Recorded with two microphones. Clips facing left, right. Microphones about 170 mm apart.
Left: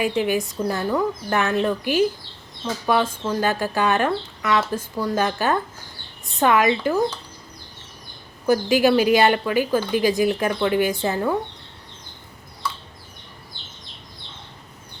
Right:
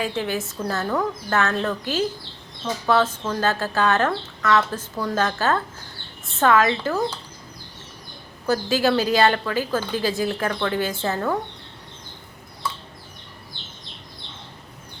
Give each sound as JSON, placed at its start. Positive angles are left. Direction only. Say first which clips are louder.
{"t": 0.0, "sound": "speech", "louder": "left 4 dB", "side_deg": 15}
{"t": 8.4, "sound": "speech", "louder": "left 3 dB", "side_deg": 15}